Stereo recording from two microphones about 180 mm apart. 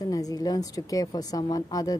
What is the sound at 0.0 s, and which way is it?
Speech, 20° left (ahead or behind).